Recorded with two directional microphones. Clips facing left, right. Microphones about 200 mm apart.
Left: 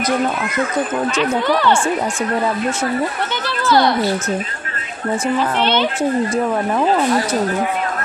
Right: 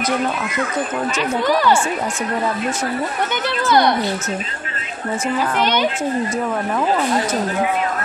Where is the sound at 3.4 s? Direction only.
20° right (ahead or behind).